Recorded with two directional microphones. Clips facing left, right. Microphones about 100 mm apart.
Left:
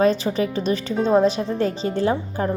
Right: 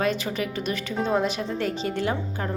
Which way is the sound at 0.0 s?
30° left (ahead or behind).